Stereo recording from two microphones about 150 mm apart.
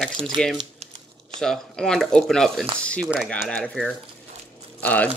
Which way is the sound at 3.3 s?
5° left (ahead or behind).